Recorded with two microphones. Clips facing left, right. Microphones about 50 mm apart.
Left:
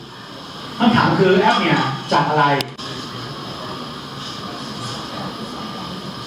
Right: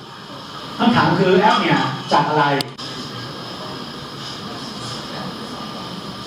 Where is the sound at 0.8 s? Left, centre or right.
Centre.